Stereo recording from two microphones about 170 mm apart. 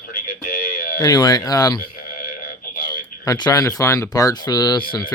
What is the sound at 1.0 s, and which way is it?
Speech, 25° left (ahead or behind).